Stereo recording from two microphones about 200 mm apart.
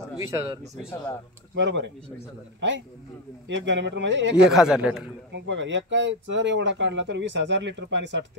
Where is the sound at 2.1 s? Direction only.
10° left (ahead or behind).